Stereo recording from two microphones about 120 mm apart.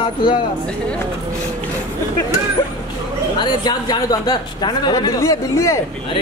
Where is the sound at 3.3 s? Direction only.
35° left (ahead or behind).